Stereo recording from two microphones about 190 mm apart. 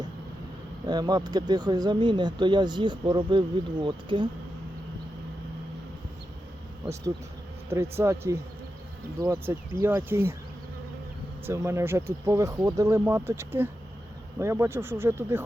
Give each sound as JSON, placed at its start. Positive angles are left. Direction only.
{"t": 0.9, "sound": "speech", "side_deg": -20}
{"t": 7.7, "sound": "speech", "side_deg": -15}
{"t": 11.4, "sound": "speech", "side_deg": -15}